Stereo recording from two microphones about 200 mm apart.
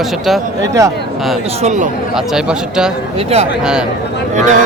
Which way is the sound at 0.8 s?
15° right (ahead or behind).